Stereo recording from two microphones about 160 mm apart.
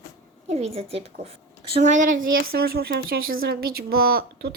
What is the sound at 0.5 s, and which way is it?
Speech, 40° right (ahead or behind).